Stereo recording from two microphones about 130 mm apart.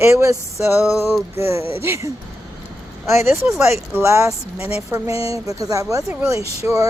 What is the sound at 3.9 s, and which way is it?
Speech, 20° right (ahead or behind).